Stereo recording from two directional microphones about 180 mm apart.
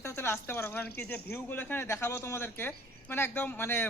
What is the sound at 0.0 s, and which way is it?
Speech, 15° left (ahead or behind).